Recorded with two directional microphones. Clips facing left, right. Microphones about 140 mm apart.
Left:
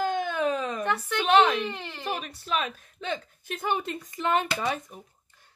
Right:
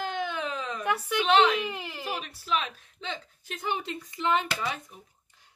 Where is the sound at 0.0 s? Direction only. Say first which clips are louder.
Left 5 dB; 45° left (ahead or behind).